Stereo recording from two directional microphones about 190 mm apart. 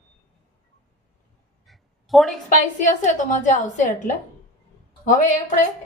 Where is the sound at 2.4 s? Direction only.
40° left (ahead or behind).